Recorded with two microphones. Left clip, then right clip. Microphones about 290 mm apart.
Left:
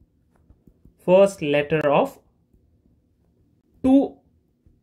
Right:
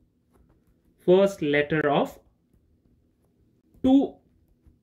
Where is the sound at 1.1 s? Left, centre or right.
Left.